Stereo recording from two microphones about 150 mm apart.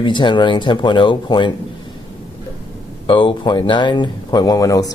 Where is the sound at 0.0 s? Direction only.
30° left (ahead or behind).